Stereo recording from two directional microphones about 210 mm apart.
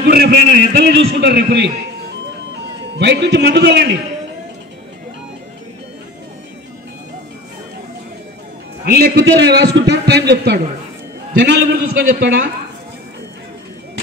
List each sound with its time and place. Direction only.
0.0 s a man's voice: 50° right (ahead or behind)
3.0 s a man's voice: 55° right (ahead or behind)
8.8 s a man's voice: 50° right (ahead or behind)